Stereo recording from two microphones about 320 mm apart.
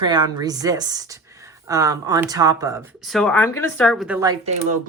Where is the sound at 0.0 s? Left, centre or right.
Centre.